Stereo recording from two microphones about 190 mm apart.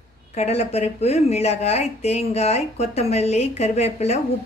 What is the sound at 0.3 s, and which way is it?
A woman's voice, 35° left (ahead or behind).